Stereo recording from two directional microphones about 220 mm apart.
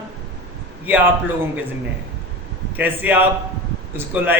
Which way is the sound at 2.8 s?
10° right (ahead or behind).